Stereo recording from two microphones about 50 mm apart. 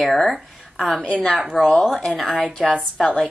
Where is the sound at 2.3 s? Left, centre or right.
Left.